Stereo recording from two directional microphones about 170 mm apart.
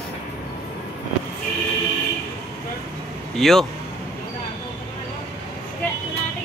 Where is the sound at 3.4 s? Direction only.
Centre (ahead or behind).